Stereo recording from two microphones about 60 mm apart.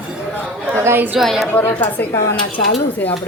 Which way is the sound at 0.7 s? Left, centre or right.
Right.